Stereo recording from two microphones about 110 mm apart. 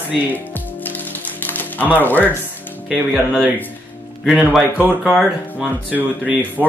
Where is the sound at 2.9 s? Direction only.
5° left (ahead or behind).